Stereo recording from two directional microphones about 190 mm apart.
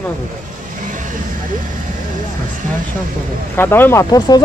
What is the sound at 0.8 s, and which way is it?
Vehicle, 45° right (ahead or behind).